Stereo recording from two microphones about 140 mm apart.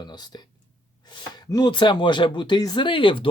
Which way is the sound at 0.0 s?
30° left (ahead or behind).